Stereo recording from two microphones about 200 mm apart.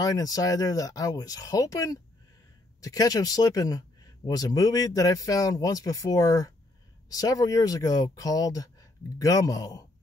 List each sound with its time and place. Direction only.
0.0 s speech: 20° left (ahead or behind)